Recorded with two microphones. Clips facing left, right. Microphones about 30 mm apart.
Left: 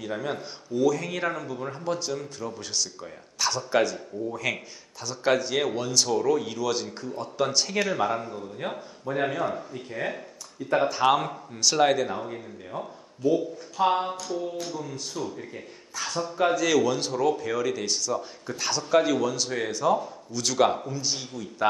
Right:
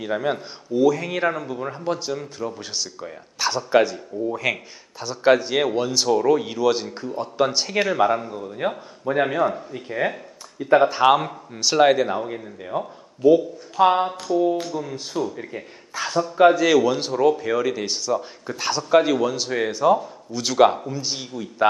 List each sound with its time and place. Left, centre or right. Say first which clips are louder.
0.0 s speech: right 7 dB; right